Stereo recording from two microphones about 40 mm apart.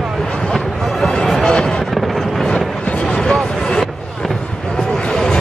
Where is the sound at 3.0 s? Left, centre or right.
Centre.